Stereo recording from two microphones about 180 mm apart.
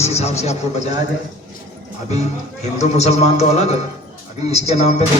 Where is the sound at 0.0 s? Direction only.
35° left (ahead or behind).